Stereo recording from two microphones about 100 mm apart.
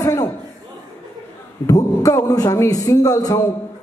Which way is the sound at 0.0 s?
30° left (ahead or behind).